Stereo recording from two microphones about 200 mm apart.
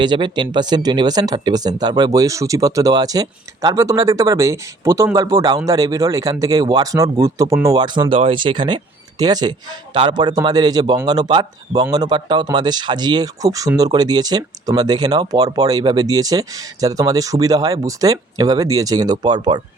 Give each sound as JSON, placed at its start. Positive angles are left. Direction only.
{"t": 0.0, "sound": "a man's voice", "side_deg": -20}